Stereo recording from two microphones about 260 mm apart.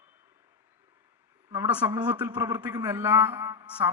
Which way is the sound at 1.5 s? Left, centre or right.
Centre.